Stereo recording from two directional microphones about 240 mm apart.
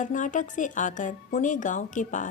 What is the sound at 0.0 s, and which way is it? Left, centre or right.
A woman's voice, left.